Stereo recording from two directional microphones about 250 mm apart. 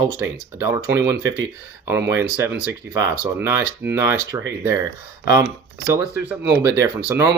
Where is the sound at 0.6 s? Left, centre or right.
Centre.